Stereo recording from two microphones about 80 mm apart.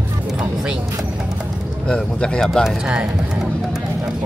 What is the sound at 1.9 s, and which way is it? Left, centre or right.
Speech, centre.